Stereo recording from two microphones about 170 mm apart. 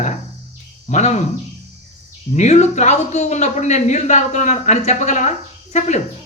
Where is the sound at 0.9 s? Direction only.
40° left (ahead or behind).